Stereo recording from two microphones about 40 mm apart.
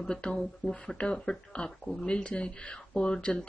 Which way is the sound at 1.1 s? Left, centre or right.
Centre.